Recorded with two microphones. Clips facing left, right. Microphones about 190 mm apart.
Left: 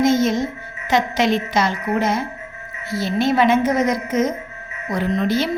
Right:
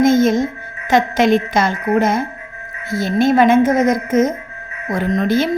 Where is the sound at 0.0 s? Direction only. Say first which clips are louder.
Right 4 dB; 50° right (ahead or behind).